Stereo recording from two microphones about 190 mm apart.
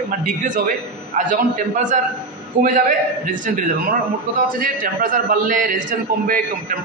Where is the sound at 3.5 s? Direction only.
45° right (ahead or behind).